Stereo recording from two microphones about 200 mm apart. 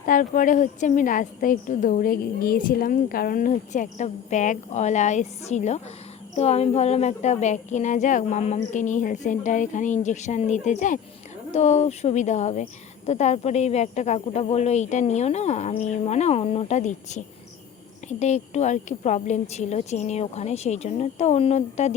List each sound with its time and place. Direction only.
0.0 s a woman's voice: 40° left (ahead or behind)
18.2 s a woman's voice: 35° left (ahead or behind)